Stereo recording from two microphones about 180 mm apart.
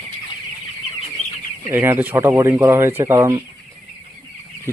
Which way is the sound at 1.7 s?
10° right (ahead or behind).